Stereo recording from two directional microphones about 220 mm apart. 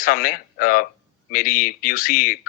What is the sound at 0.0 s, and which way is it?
A man's voice, 40° left (ahead or behind).